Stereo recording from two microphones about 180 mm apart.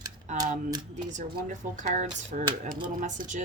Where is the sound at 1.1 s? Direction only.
45° right (ahead or behind).